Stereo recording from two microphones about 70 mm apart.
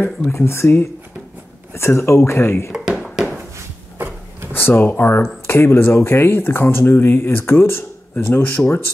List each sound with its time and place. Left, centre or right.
0.3 s speech: left
3.5 s a sound: right
4.5 s speech: left